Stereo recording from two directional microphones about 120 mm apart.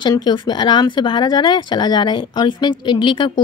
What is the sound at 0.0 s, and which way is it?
Speech, 40° left (ahead or behind).